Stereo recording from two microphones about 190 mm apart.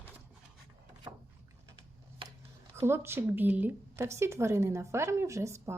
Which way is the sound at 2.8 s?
15° right (ahead or behind).